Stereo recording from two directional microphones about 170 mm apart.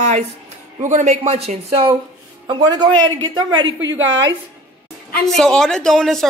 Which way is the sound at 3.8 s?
90° right.